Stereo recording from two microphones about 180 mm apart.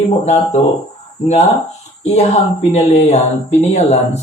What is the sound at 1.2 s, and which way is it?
Speech, 40° left (ahead or behind).